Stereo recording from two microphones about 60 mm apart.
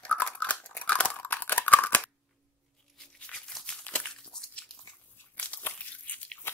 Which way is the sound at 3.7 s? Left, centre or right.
Centre.